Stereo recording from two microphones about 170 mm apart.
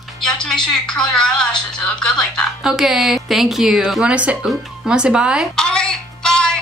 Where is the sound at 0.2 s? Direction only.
5° left (ahead or behind).